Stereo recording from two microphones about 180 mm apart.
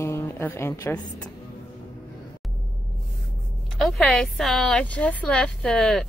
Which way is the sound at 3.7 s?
Centre (ahead or behind).